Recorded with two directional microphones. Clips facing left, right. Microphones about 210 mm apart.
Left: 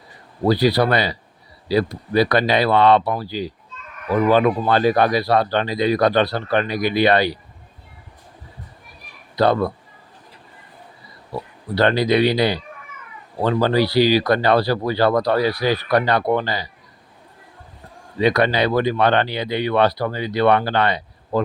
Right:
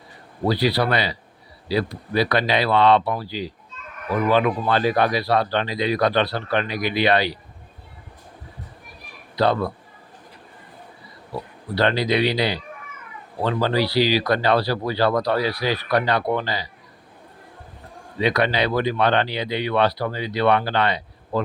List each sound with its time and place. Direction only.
0.4 s speech: 45° left (ahead or behind)
9.3 s speech: 45° left (ahead or behind)
11.7 s speech: 45° left (ahead or behind)
18.2 s speech: 45° left (ahead or behind)